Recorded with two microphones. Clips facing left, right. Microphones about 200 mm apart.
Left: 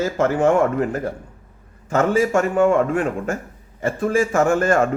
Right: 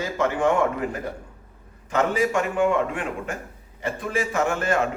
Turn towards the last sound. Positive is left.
turn(degrees=45)  # may be behind; listen again after turning